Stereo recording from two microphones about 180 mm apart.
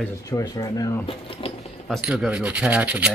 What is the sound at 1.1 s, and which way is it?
Speech, 30° left (ahead or behind).